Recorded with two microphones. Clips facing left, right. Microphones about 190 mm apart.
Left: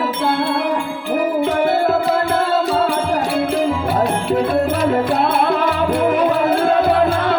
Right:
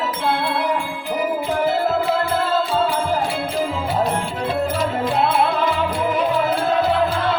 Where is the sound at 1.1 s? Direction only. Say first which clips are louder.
Left 4 dB; 65° left (ahead or behind).